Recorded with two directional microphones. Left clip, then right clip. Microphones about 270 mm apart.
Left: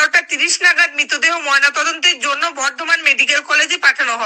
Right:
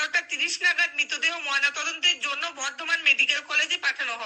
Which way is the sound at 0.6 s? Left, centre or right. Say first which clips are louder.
Left 10 dB; left.